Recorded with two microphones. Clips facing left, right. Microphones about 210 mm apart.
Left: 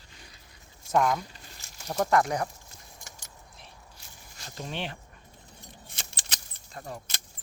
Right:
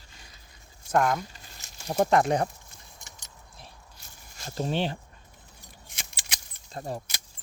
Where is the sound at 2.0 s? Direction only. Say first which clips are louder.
Right 3 dB; 25° right (ahead or behind).